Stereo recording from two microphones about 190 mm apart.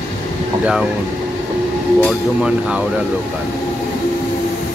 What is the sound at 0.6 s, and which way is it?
Speech, 5° right (ahead or behind).